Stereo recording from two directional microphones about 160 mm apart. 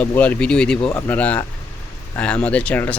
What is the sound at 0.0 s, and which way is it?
Speech, 10° left (ahead or behind).